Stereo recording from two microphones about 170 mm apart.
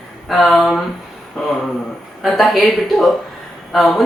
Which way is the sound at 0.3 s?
Centre (ahead or behind).